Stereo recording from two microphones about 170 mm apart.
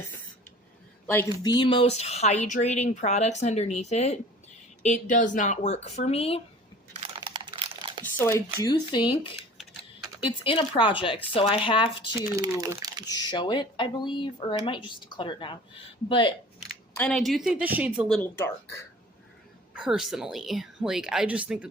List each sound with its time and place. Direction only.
1.0 s speech: 15° left (ahead or behind); by 6.4 s 35° left (ahead or behind)
6.9 s a sound: 35° right (ahead or behind)
7.2 s computer keyboard: 30° right (ahead or behind)
8.0 s a sound: 15° left (ahead or behind)
8.5 s speech: 25° left (ahead or behind)
12.7 s speech: 20° right (ahead or behind)
13.1 s speech: 25° left (ahead or behind)
16.9 s speech: 5° left (ahead or behind)
18.1 s speech: 10° left (ahead or behind)
19.7 s speech: 5° right (ahead or behind)